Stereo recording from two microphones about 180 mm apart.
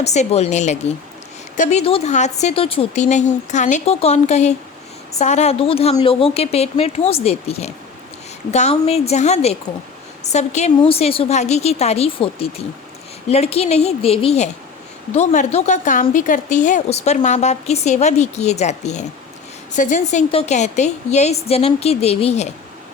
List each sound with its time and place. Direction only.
0.0 s a woman's voice: 40° left (ahead or behind)